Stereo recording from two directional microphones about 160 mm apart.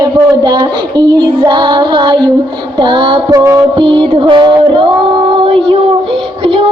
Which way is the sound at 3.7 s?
35° right (ahead or behind).